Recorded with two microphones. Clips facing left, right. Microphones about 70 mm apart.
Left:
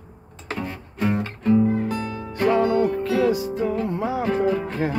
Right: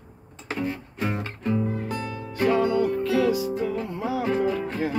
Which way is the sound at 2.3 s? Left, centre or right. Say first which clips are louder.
Left 2 dB; left.